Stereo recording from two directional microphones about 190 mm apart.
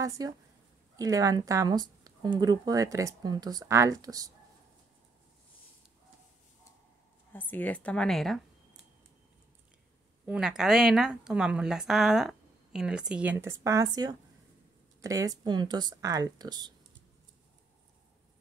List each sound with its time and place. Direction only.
0.2 s speech: 20° right (ahead or behind)
7.3 s speech: 10° left (ahead or behind)
10.2 s a woman's voice: 5° right (ahead or behind); by 16.7 s 20° right (ahead or behind)